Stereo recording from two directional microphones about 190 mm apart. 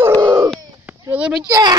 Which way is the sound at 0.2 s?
15° right (ahead or behind).